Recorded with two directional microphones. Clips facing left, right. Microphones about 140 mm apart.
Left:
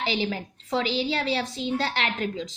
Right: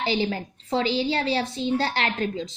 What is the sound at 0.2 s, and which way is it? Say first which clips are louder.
A woman's voice: right 2 dB; 30° right (ahead or behind).